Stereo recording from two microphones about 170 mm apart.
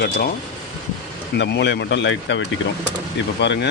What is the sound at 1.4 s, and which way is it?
Speech, 90° left.